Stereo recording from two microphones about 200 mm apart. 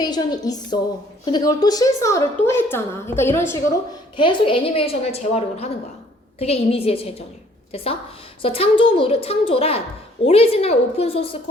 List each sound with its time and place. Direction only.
0.0 s a woman's voice: 20° left (ahead or behind)
4.2 s a woman's voice: 25° left (ahead or behind)
8.4 s a woman's voice: 30° left (ahead or behind)